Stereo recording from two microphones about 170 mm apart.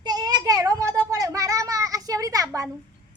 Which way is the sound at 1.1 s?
20° right (ahead or behind).